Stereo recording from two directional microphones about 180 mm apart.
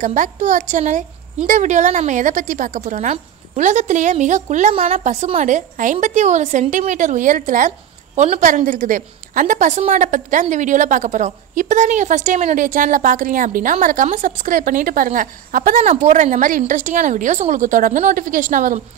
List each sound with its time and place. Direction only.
0.0 s a woman's voice: 45° right (ahead or behind)